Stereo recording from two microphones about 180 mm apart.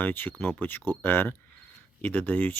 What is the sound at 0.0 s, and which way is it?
Speech, 10° left (ahead or behind).